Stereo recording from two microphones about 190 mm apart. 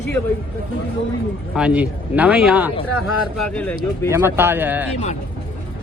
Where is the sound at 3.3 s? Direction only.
5° left (ahead or behind).